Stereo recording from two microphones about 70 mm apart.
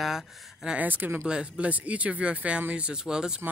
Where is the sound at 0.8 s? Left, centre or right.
Right.